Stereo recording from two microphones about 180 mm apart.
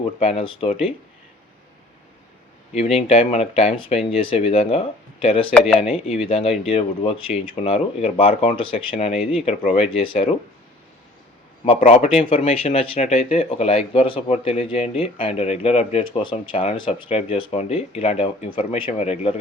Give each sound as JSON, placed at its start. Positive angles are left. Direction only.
{"t": 0.0, "sound": "speech", "side_deg": 35}
{"t": 2.7, "sound": "speech", "side_deg": 35}
{"t": 11.9, "sound": "speech", "side_deg": 35}